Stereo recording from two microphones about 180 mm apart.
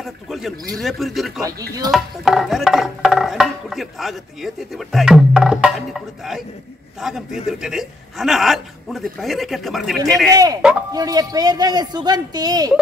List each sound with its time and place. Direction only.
0.0 s music: centre (ahead or behind)
10.3 s speech: 20° right (ahead or behind)